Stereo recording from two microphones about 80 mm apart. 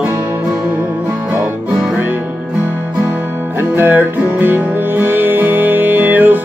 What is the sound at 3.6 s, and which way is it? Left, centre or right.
Music, right.